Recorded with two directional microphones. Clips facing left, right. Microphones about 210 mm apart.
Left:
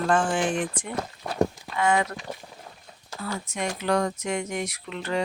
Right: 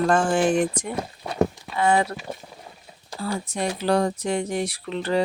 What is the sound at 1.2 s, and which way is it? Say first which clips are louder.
Clip-clop: right 2 dB; centre (ahead or behind).